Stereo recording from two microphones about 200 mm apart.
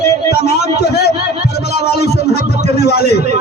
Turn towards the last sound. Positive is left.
turn(degrees=50)  # may be behind; listen again after turning